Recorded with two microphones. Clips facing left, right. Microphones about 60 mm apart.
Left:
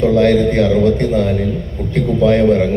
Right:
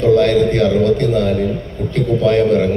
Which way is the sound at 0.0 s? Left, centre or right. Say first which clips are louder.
Even; left.